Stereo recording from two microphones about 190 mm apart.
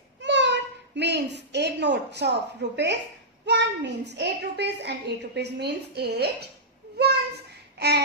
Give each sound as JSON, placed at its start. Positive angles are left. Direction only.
{"t": 0.2, "sound": "a child's voice", "side_deg": -70}
{"t": 7.0, "sound": "child singing", "side_deg": -60}